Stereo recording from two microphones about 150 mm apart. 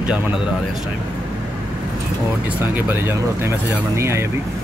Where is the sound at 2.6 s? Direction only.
15° right (ahead or behind).